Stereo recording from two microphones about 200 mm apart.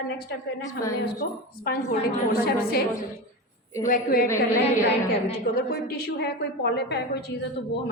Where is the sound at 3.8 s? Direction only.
40° left (ahead or behind).